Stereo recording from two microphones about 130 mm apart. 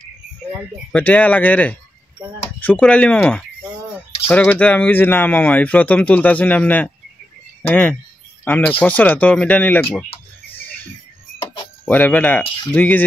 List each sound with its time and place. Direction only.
0.9 s speech: 10° left (ahead or behind)
10.0 s a sound: 45° left (ahead or behind)
11.8 s speech: 10° left (ahead or behind)